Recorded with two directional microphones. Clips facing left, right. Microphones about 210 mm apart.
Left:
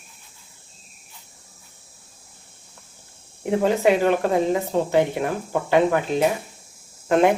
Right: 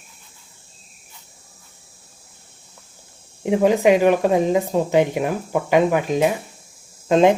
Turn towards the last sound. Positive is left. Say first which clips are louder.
# right 3 dB
turn(degrees=-20)  # may be behind; listen again after turning